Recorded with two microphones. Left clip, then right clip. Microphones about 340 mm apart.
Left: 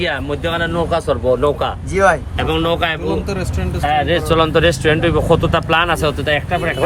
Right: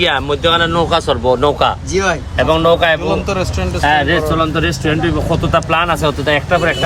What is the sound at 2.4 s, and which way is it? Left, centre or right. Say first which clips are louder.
A man's voice: right 6 dB; centre.